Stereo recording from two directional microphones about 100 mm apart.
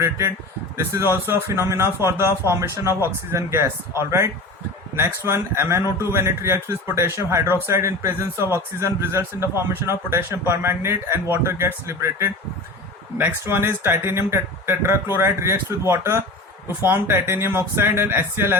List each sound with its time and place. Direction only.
0.0 s a man's voice: 30° right (ahead or behind)